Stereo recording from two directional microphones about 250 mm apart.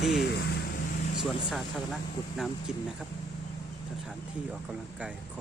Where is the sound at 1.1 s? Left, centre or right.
Centre.